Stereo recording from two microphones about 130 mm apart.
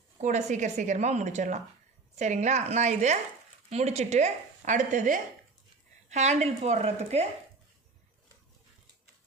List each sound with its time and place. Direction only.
0.2 s a woman's voice: 65° right (ahead or behind)
6.1 s speech: 60° right (ahead or behind)